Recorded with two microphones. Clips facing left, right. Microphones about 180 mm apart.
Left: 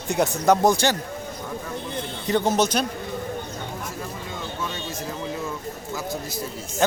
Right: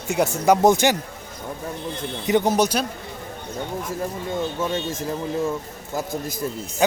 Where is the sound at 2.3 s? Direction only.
15° right (ahead or behind).